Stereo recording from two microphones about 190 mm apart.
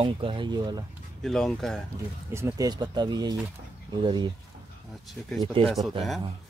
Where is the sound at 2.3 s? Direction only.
15° right (ahead or behind).